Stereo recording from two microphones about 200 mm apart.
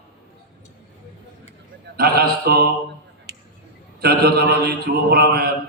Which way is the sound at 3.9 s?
50° right (ahead or behind).